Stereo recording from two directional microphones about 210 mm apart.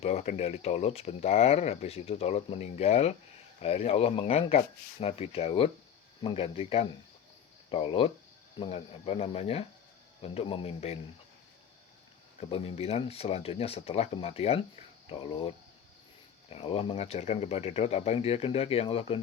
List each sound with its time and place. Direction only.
0.0 s speech: 30° left (ahead or behind)
12.4 s speech: 30° left (ahead or behind)